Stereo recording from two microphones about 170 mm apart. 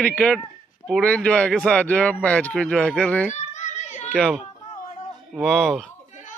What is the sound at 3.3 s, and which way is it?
Children playing, 45° left (ahead or behind).